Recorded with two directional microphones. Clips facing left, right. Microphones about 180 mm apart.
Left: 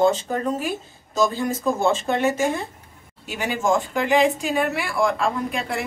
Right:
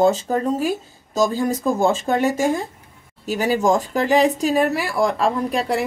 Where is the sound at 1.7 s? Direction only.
40° right (ahead or behind).